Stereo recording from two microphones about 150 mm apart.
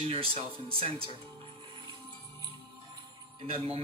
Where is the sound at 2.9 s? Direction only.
40° right (ahead or behind).